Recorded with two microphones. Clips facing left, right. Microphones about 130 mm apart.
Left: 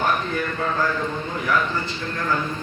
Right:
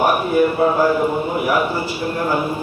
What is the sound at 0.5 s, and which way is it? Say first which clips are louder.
Speech: right 9 dB; 30° right (ahead or behind).